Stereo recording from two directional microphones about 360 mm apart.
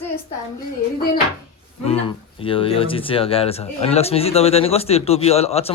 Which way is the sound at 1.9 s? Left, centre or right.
Centre.